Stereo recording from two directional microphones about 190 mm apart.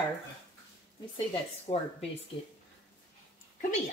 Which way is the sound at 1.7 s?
30° left (ahead or behind).